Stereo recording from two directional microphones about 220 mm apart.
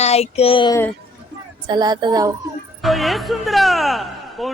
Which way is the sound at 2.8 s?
Centre (ahead or behind).